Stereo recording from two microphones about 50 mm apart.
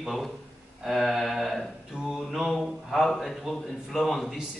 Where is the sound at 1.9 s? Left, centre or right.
Right.